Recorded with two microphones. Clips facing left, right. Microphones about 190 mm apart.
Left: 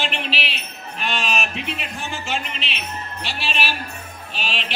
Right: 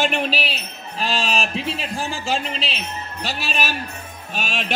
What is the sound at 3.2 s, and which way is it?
Speech, 40° right (ahead or behind).